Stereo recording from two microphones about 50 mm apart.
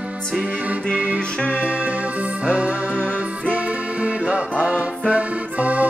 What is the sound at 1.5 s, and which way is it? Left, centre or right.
Music, right.